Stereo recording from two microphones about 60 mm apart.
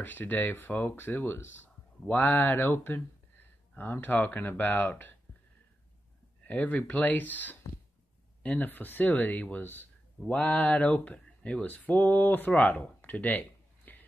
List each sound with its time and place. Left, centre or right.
0.0 s speech: left
0.9 s speech: left
6.4 s speech: left